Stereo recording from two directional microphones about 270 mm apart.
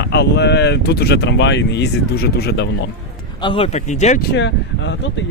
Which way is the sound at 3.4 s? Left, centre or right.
Centre.